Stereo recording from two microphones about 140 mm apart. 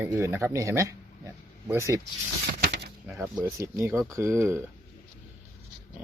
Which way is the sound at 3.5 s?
20° right (ahead or behind).